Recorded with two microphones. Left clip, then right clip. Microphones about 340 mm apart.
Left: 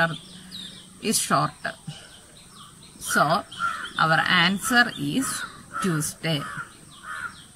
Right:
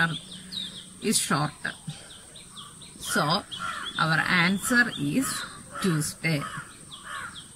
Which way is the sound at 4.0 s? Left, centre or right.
Centre.